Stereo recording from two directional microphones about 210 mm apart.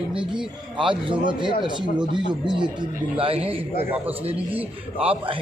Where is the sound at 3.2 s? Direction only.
25° right (ahead or behind).